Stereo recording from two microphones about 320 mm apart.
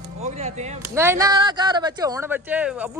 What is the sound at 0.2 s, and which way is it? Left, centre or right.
Speech, right.